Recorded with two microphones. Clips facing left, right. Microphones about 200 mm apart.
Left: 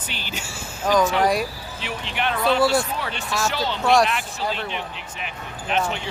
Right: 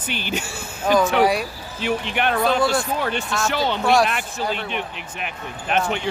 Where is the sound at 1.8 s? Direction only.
55° right (ahead or behind).